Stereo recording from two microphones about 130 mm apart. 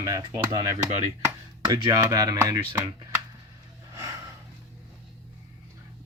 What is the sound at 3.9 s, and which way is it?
Snort, 25° right (ahead or behind).